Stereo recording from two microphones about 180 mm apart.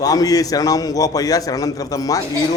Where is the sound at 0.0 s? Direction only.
20° left (ahead or behind).